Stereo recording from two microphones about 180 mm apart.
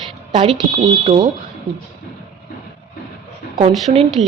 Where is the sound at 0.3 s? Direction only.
25° right (ahead or behind).